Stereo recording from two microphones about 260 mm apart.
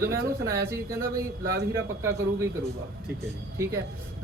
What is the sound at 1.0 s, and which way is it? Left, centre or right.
Speech, right.